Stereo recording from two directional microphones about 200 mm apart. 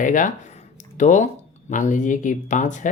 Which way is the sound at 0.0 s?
40° left (ahead or behind).